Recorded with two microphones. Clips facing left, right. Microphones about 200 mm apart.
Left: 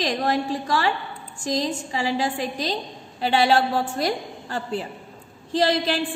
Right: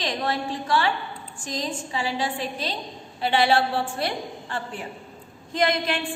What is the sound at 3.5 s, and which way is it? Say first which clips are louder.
A woman's voice: left 2 dB; 40° left (ahead or behind).